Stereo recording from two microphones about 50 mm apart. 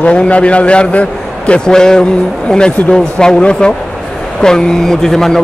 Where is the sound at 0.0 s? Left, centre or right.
Left.